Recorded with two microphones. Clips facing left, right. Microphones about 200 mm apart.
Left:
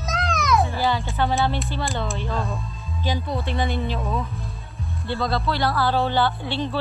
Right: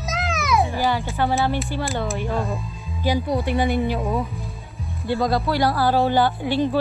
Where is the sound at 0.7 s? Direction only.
15° right (ahead or behind).